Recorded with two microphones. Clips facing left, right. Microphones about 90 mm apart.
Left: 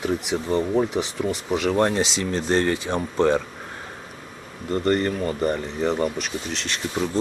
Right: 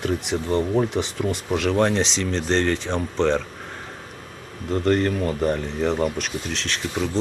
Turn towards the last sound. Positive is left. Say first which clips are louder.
# right 1 dB
turn(degrees=0)  # may be behind; listen again after turning